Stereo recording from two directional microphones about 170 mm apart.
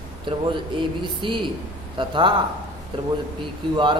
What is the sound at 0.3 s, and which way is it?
A man's voice, 30° right (ahead or behind).